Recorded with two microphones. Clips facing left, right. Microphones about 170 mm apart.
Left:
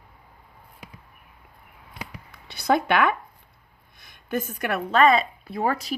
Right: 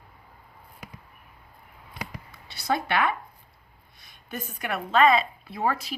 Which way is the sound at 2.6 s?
55° left (ahead or behind).